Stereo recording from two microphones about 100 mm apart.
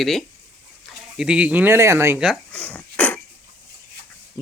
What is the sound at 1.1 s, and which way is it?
Speech, 10° right (ahead or behind).